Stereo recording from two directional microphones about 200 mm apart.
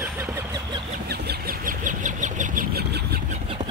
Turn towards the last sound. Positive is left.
turn(degrees=-30)  # may be behind; listen again after turning